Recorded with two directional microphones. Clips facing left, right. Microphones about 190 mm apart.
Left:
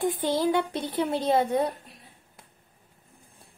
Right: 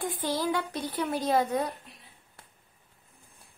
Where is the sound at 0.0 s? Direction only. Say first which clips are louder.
Left 5 dB; 25° left (ahead or behind).